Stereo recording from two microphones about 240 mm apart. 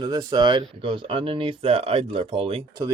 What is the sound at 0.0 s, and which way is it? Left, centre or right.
Speech, centre.